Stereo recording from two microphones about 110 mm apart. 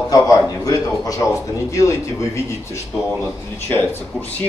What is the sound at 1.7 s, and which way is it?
Speech, 30° left (ahead or behind).